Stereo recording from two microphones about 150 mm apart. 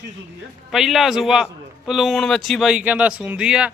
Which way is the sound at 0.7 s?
Centre (ahead or behind).